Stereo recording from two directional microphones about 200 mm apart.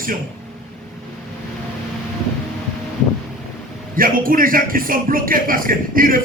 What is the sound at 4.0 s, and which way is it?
A man's voice, 45° right (ahead or behind).